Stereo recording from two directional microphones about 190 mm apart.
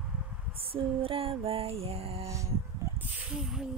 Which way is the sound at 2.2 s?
15° right (ahead or behind).